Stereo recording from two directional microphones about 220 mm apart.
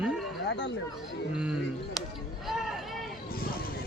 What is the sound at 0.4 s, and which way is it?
Speech, 55° left (ahead or behind).